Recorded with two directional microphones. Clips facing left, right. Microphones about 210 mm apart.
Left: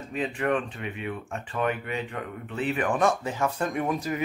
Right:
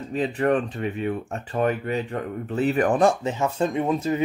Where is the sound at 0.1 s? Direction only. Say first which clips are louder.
Right 5 dB; 35° right (ahead or behind).